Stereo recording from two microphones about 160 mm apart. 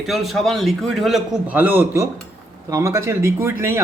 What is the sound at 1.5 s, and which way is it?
Speech, 10° right (ahead or behind).